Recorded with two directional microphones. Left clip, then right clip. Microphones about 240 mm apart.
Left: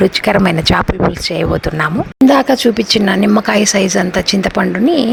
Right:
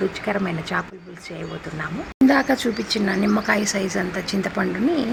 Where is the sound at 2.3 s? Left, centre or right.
Left.